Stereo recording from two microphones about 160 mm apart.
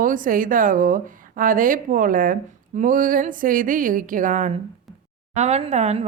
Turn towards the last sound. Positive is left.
turn(degrees=-45)  # may be behind; listen again after turning